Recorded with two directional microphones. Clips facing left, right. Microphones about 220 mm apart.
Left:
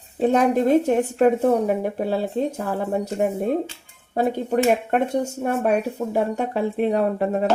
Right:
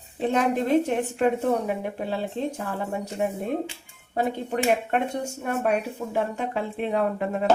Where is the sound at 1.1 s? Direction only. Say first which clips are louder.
Left 5 dB; 40° left (ahead or behind).